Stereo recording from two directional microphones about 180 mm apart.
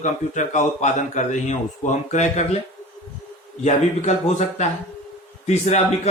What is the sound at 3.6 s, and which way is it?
Speech, 40° left (ahead or behind).